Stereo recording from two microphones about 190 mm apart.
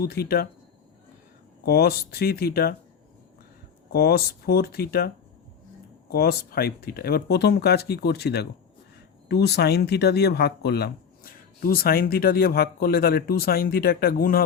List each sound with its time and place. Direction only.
0.0 s speech: 55° left (ahead or behind)
1.6 s speech: 55° left (ahead or behind)
3.9 s speech: 55° left (ahead or behind)